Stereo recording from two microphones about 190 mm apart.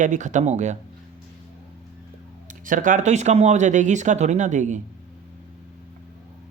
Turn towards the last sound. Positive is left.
turn(degrees=-40)  # may be behind; listen again after turning